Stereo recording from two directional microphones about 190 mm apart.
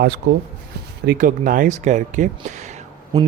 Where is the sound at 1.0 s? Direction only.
45° right (ahead or behind).